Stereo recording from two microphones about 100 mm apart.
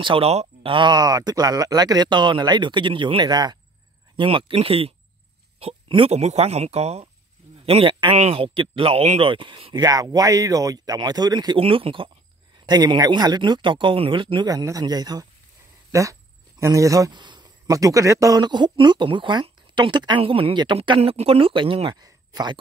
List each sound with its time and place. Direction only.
0.0 s speech: 70° right (ahead or behind); by 3.5 s 45° right (ahead or behind)
4.2 s speech: 60° right (ahead or behind); by 7.1 s 90° right
7.6 s speech: 65° right (ahead or behind)
9.8 s speech: 40° right (ahead or behind)
11.5 s speech: 65° right (ahead or behind)
12.5 s speech: 45° right (ahead or behind)
14.5 s speech: 35° right (ahead or behind)
17.1 s a sound: 50° right (ahead or behind)
17.6 s speech: 35° right (ahead or behind)
18.4 s speech: 50° right (ahead or behind)
20.2 s speech: 65° right (ahead or behind)
21.0 s speech: 80° right; by 21.9 s 60° right (ahead or behind)
22.0 s speech: 45° right (ahead or behind)